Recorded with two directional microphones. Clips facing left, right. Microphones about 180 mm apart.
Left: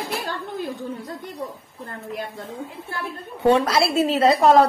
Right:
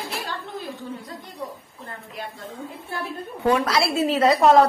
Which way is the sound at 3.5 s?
25° left (ahead or behind).